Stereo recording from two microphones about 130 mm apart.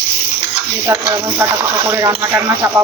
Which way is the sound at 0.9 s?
20° right (ahead or behind).